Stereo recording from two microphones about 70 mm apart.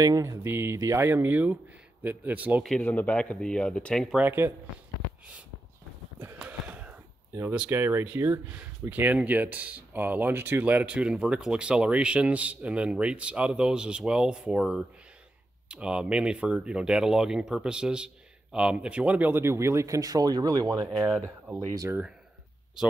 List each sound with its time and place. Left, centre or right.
0.2 s speech: right
2.8 s speech: left
4.2 s speech: right
6.4 s a sound: centre
7.7 s speech: right
19.4 s speech: right
20.7 s speech: right